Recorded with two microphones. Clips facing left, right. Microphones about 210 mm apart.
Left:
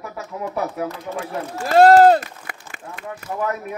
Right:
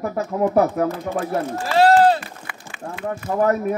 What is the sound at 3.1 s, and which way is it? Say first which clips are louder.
Speech: right 6 dB; 45° right (ahead or behind).